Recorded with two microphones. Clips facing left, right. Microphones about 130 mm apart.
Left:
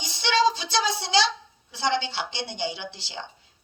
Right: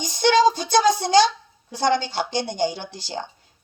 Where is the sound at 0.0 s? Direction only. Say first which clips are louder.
Right 6 dB; 45° right (ahead or behind).